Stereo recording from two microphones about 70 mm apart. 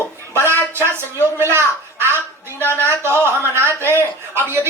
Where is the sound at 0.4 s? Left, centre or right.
Right.